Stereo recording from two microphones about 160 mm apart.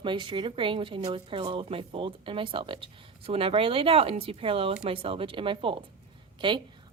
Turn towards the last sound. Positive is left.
turn(degrees=-30)  # may be behind; listen again after turning